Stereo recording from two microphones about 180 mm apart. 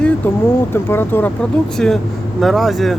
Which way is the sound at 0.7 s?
10° left (ahead or behind).